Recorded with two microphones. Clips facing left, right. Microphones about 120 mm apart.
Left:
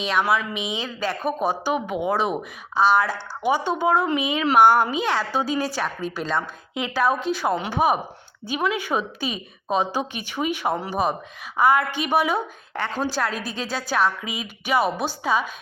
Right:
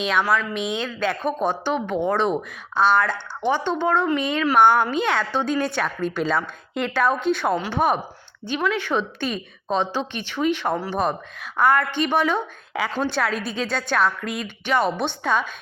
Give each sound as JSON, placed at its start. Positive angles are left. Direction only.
{"t": 0.0, "sound": "a woman's voice", "side_deg": 5}
{"t": 7.5, "sound": "a woman's voice", "side_deg": 15}
{"t": 7.8, "sound": "a woman's voice", "side_deg": 5}